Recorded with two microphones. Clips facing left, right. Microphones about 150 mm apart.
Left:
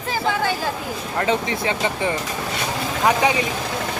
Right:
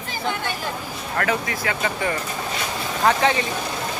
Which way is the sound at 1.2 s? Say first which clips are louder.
Left 3 dB; 25° left (ahead or behind).